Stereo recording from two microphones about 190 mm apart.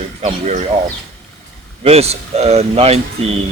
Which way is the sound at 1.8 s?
35° right (ahead or behind).